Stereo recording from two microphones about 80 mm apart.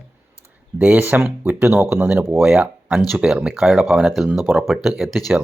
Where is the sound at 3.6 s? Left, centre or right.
Centre.